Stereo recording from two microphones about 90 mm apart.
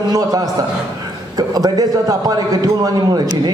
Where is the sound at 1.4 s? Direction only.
45° right (ahead or behind).